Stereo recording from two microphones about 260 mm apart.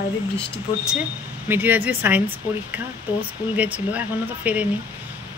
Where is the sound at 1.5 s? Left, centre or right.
Centre.